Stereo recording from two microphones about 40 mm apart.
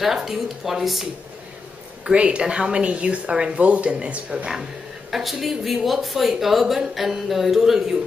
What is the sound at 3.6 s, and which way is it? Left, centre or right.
Speech, right.